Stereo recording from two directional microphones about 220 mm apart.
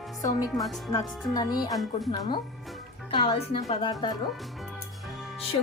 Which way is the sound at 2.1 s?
20° left (ahead or behind).